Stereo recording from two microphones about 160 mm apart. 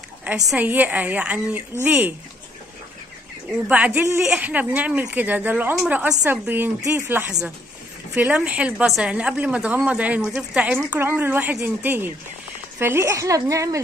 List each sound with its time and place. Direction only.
0.5 s a woman's voice: 10° right (ahead or behind)
3.6 s a woman's voice: 10° right (ahead or behind)